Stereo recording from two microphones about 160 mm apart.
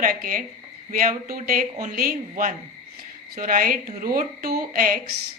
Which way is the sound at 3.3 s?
65° right (ahead or behind).